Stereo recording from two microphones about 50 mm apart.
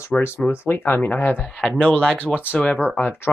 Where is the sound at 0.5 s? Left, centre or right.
Left.